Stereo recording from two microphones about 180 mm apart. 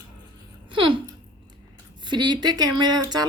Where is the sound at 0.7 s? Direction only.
30° right (ahead or behind).